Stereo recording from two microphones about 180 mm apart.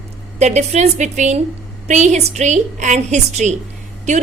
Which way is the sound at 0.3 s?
40° right (ahead or behind).